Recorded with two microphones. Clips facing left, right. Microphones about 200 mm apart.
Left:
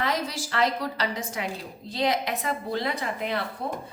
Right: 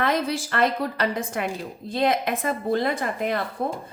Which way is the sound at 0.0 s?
55° right (ahead or behind).